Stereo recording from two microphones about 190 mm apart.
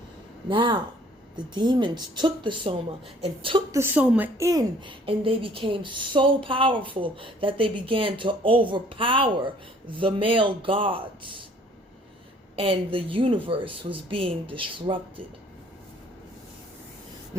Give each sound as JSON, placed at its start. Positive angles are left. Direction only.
{"t": 0.4, "sound": "a woman's voice", "side_deg": -25}
{"t": 3.7, "sound": "a woman's voice", "side_deg": -10}
{"t": 12.5, "sound": "a woman's voice", "side_deg": -30}